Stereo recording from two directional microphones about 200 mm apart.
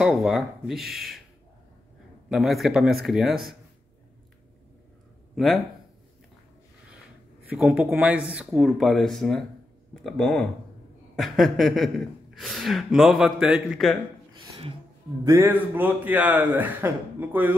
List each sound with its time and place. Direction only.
0.0 s speech: centre (ahead or behind)
2.2 s speech: centre (ahead or behind)
5.3 s speech: centre (ahead or behind)
7.4 s speech: 5° right (ahead or behind)
14.4 s a sound: 25° right (ahead or behind)
15.2 s speech: 15° right (ahead or behind)